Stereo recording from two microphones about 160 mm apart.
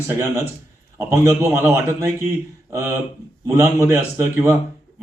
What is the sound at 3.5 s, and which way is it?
A man's voice, 15° right (ahead or behind).